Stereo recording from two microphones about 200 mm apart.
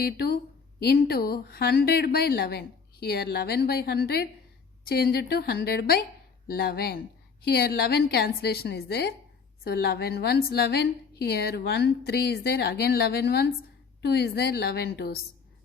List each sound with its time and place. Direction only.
0.0 s a woman's voice: 50° left (ahead or behind)